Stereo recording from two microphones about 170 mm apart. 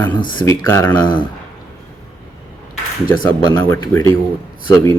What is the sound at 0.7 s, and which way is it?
Speech, 15° left (ahead or behind).